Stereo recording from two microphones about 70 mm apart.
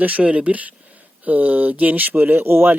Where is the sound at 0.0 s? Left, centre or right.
Right.